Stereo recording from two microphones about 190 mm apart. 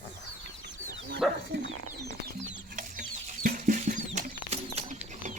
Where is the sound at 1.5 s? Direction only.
60° right (ahead or behind).